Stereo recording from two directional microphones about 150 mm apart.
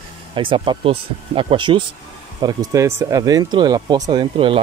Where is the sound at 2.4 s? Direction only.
20° right (ahead or behind).